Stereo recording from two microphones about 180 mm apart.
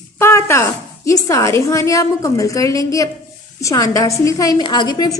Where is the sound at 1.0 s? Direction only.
15° left (ahead or behind).